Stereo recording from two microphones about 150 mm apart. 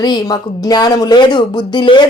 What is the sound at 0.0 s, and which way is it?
Speech, 25° left (ahead or behind).